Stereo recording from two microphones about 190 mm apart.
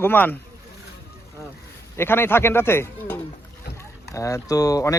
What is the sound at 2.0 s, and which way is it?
Speech, 10° left (ahead or behind).